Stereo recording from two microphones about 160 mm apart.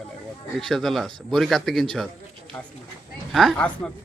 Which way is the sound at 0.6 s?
Centre (ahead or behind).